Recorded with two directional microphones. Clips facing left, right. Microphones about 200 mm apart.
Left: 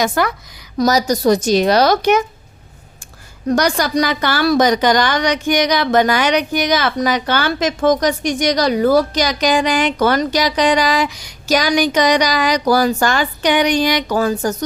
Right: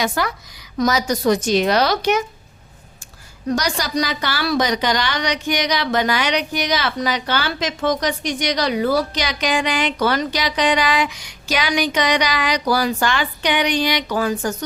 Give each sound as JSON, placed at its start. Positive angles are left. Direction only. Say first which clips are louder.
{"t": 0.0, "sound": "a woman's voice", "louder": "left 4 dB", "side_deg": 50}
{"t": 0.8, "sound": "speech", "louder": "left 4 dB", "side_deg": 40}
{"t": 3.5, "sound": "a woman's voice", "louder": "left 5 dB", "side_deg": 55}